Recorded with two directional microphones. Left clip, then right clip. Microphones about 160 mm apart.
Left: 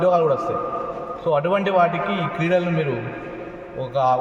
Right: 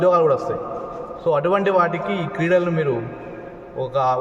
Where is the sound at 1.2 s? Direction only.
35° right (ahead or behind).